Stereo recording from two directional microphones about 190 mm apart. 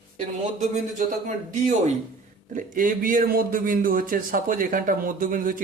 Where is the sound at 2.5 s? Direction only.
45° right (ahead or behind).